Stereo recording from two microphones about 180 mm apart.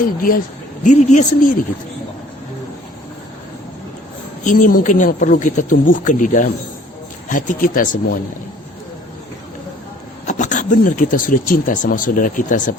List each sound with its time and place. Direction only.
0.2 s speech: 50° left (ahead or behind)
0.9 s speech: 40° left (ahead or behind)
4.4 s speech: 50° left (ahead or behind)
10.2 s speech: 40° left (ahead or behind)